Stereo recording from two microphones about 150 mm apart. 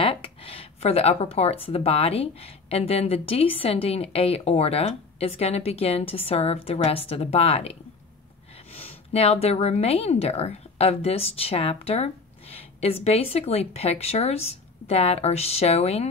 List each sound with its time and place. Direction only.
0.0 s speech: 40° left (ahead or behind)
8.7 s a woman's voice: 40° left (ahead or behind)